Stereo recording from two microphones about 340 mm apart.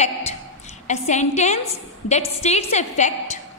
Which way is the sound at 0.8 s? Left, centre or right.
Centre.